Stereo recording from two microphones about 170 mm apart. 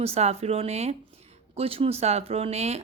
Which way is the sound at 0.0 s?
40° right (ahead or behind).